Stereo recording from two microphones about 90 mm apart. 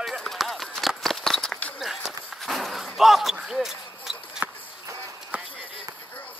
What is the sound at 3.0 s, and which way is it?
Basketball bounce, 5° right (ahead or behind).